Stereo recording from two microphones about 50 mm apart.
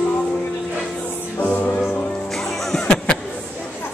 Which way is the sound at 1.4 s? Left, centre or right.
Left.